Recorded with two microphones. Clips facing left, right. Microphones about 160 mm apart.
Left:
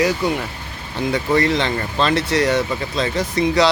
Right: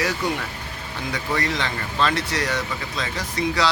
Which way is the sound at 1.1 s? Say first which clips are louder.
Left 8 dB; 25° left (ahead or behind).